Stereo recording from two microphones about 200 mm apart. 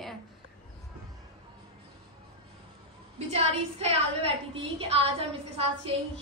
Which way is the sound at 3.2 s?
30° right (ahead or behind).